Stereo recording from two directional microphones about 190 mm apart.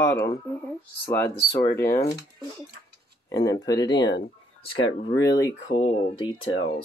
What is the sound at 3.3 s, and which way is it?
Speech, 20° left (ahead or behind).